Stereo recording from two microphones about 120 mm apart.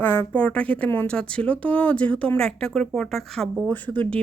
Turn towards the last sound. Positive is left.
turn(degrees=10)  # may be behind; listen again after turning